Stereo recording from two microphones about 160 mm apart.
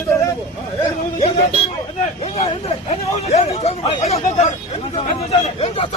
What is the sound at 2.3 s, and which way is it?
A man's voice, 40° left (ahead or behind).